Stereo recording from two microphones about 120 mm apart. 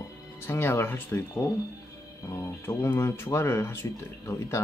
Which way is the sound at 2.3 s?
25° left (ahead or behind).